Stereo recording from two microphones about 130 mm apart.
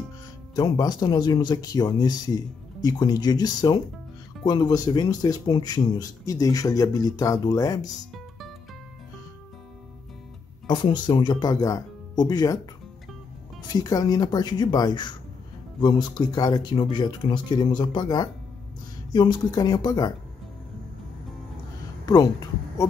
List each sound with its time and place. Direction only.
0.6 s speech: 30° left (ahead or behind)
8.1 s music: centre (ahead or behind)
10.7 s speech: 35° left (ahead or behind)
13.6 s speech: 35° left (ahead or behind)
22.0 s speech: 30° left (ahead or behind)